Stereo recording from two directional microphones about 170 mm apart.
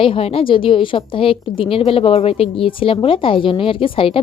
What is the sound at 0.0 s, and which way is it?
A woman's voice, 35° left (ahead or behind).